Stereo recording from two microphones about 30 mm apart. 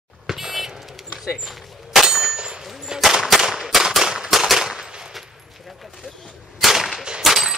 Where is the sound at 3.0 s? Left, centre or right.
Centre.